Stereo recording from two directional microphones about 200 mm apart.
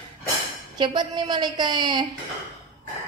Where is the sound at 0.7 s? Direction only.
20° right (ahead or behind).